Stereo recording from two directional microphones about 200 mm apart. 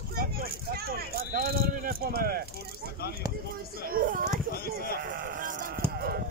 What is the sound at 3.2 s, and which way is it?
Speech, 20° right (ahead or behind).